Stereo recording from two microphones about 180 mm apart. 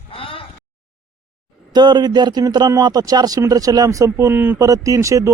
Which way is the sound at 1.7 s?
25° right (ahead or behind).